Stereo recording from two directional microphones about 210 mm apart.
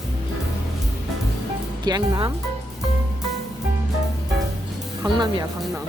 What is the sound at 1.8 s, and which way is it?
Speech, 20° right (ahead or behind).